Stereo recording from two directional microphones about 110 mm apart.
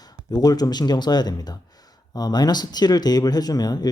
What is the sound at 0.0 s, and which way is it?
Speech, 35° left (ahead or behind).